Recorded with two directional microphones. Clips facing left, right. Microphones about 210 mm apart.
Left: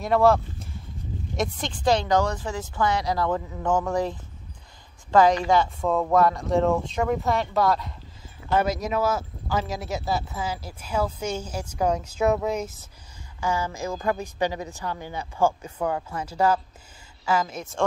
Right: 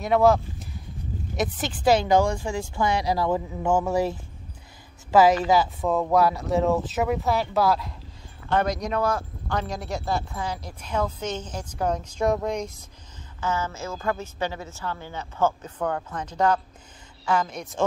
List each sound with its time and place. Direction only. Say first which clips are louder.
0.0 s a woman's voice: even; centre (ahead or behind)